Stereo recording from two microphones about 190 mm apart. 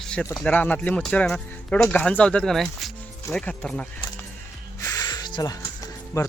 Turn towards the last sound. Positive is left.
turn(degrees=20)  # may be behind; listen again after turning